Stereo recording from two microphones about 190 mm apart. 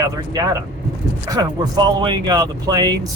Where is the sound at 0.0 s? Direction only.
20° right (ahead or behind).